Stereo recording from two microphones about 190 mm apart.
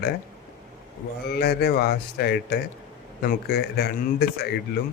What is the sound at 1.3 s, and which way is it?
Speech, 55° left (ahead or behind).